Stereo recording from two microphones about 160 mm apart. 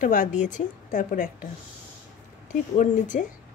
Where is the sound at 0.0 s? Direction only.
55° left (ahead or behind).